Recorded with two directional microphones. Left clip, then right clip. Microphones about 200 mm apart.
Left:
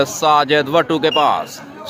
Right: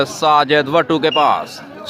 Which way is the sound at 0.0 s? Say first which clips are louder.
Even; 10° right (ahead or behind).